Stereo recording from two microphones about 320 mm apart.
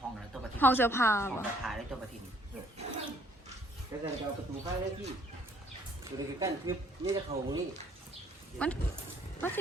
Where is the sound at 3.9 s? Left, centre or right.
Centre.